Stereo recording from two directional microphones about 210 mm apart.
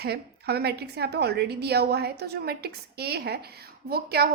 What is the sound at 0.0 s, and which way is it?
A woman's voice, 50° right (ahead or behind).